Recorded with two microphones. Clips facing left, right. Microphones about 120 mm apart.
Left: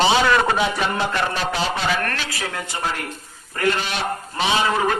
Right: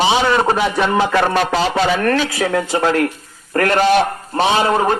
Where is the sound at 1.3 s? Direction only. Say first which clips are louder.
Right 7 dB; 90° right.